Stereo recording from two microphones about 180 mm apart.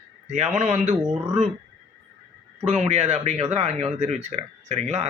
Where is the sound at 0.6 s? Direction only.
40° right (ahead or behind).